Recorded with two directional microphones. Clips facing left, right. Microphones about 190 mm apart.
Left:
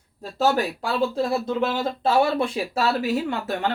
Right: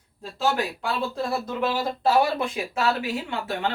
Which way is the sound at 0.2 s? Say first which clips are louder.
Left 4 dB; 35° left (ahead or behind).